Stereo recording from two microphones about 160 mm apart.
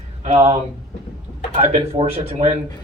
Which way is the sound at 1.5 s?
45° right (ahead or behind).